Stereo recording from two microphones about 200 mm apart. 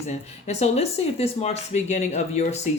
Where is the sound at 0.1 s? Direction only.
35° left (ahead or behind).